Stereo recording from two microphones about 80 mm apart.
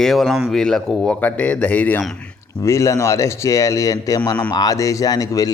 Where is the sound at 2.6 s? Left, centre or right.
Left.